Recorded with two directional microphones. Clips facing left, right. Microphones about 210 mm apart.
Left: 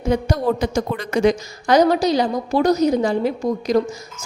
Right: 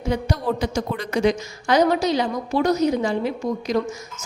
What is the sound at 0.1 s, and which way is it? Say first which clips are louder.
A woman's voice: left 4 dB; 45° left (ahead or behind).